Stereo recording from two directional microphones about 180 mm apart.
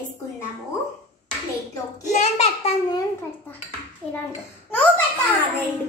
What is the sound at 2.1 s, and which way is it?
Speech, 35° left (ahead or behind).